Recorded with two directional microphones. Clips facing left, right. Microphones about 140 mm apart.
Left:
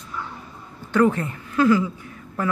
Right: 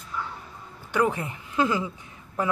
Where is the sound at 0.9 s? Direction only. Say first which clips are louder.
Left 6 dB; 15° right (ahead or behind).